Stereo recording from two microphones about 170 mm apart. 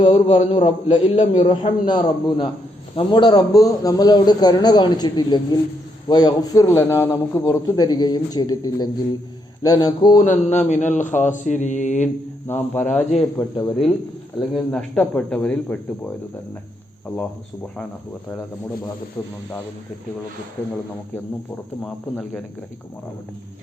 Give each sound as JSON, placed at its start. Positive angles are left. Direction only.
{"t": 0.0, "sound": "a man's voice", "side_deg": 25}
{"t": 1.1, "sound": "mantra", "side_deg": 40}
{"t": 1.9, "sound": "a man's voice", "side_deg": 25}
{"t": 10.2, "sound": "mantra", "side_deg": 45}
{"t": 12.5, "sound": "a man's voice", "side_deg": 10}
{"t": 14.5, "sound": "speech", "side_deg": 5}
{"t": 21.8, "sound": "speech", "side_deg": 5}